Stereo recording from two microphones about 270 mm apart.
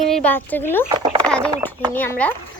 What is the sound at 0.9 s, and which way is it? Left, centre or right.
Speech, centre.